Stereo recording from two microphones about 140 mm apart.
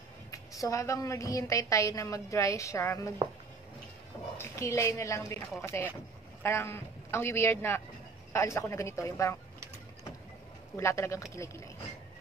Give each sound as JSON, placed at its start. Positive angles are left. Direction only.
{"t": 0.3, "sound": "a woman's voice", "side_deg": 25}
{"t": 4.4, "sound": "a woman's voice", "side_deg": 20}
{"t": 10.8, "sound": "a woman's voice", "side_deg": 20}